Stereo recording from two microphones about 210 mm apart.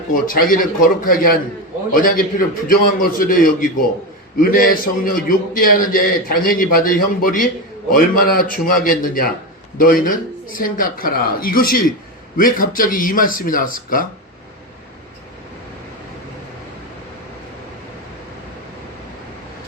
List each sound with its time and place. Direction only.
0.1 s a man's voice: 40° left (ahead or behind)